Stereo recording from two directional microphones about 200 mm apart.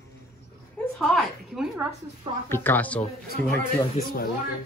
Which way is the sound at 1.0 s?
Centre (ahead or behind).